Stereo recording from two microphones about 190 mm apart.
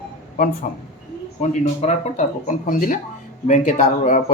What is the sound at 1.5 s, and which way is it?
Speech, 35° left (ahead or behind).